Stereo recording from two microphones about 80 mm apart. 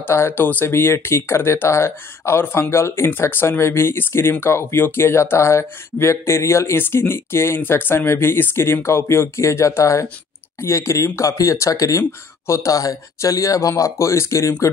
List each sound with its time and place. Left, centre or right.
0.0 s speech: left